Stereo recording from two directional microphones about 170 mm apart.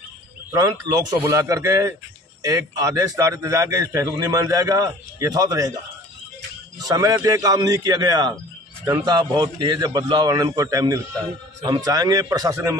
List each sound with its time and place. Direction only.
0.5 s a man's voice: 20° right (ahead or behind)
6.8 s a man's voice: 20° right (ahead or behind)